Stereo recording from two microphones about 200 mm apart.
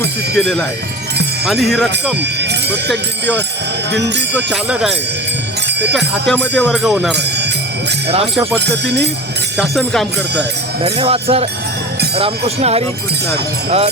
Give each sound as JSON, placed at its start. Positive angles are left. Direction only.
{"t": 0.3, "sound": "speech", "side_deg": 5}
{"t": 1.6, "sound": "speech", "side_deg": 0}
{"t": 2.4, "sound": "jingle bell", "side_deg": -55}
{"t": 4.4, "sound": "speech", "side_deg": -5}
{"t": 6.2, "sound": "music", "side_deg": 5}
{"t": 6.6, "sound": "speech", "side_deg": 0}
{"t": 8.5, "sound": "speech", "side_deg": -60}
{"t": 9.6, "sound": "speech", "side_deg": 0}
{"t": 10.8, "sound": "speech", "side_deg": -30}